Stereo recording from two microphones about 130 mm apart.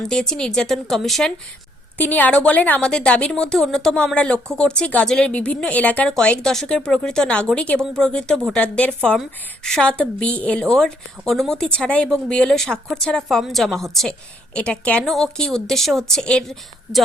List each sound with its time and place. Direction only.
0.0 s speech: 5° left (ahead or behind)
2.0 s speech: 15° left (ahead or behind)